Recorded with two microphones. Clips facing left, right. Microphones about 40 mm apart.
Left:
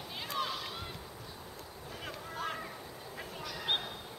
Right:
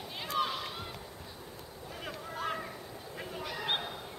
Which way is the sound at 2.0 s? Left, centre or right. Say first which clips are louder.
Right 2 dB; centre.